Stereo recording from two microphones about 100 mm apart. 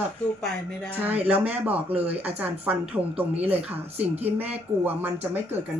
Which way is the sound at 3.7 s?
90° right.